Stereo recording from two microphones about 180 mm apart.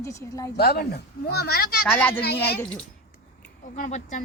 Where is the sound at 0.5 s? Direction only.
60° left (ahead or behind).